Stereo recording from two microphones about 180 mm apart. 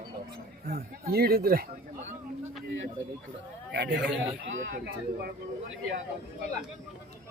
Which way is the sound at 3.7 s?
70° right (ahead or behind).